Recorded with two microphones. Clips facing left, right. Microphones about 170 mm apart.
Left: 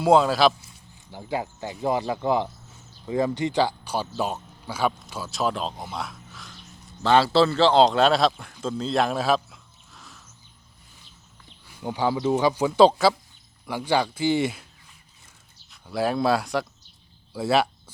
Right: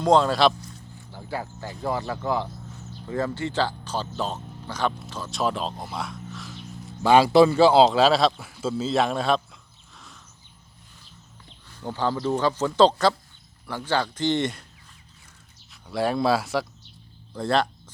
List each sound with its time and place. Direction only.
0.0 s speech: 5° left (ahead or behind)
7.0 s a man's voice: 10° right (ahead or behind)
11.7 s speech: 10° left (ahead or behind)
15.7 s speech: centre (ahead or behind)